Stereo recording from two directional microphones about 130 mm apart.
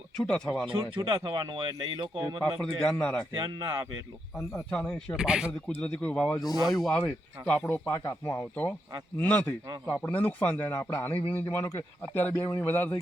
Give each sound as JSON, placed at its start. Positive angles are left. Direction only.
{"t": 0.2, "sound": "a man's voice", "side_deg": 5}
{"t": 0.7, "sound": "speech", "side_deg": -40}
{"t": 2.4, "sound": "a man's voice", "side_deg": 5}
{"t": 3.3, "sound": "speech", "side_deg": -30}
{"t": 4.4, "sound": "a man's voice", "side_deg": 10}
{"t": 5.1, "sound": "speech", "side_deg": -5}
{"t": 5.8, "sound": "a man's voice", "side_deg": 10}
{"t": 6.3, "sound": "speech", "side_deg": 30}
{"t": 7.4, "sound": "a man's voice", "side_deg": 10}
{"t": 7.9, "sound": "speech", "side_deg": 25}
{"t": 9.1, "sound": "a man's voice", "side_deg": 15}